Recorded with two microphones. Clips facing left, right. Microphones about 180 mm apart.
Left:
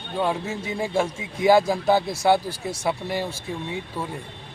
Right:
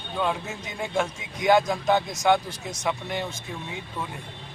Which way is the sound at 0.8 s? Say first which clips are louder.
Left 2 dB; 35° left (ahead or behind).